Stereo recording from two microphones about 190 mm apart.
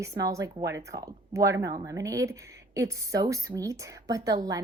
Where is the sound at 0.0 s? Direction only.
15° right (ahead or behind).